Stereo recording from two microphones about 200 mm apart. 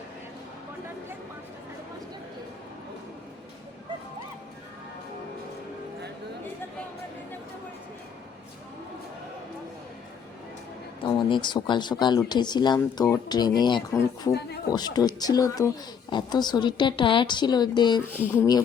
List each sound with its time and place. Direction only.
11.0 s speech: 25° left (ahead or behind)